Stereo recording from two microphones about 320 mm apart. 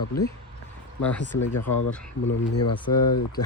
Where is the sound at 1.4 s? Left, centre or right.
Left.